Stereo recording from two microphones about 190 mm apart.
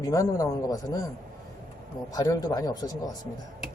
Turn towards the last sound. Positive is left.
turn(degrees=20)  # may be behind; listen again after turning